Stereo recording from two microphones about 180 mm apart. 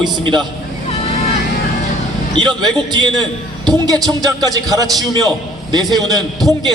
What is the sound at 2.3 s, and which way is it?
A man's voice, 25° right (ahead or behind).